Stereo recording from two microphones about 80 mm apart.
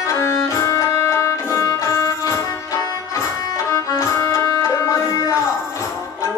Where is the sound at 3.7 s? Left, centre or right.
Left.